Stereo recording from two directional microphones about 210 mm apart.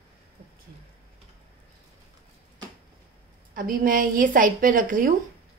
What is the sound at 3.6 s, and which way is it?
A woman's voice, 40° right (ahead or behind).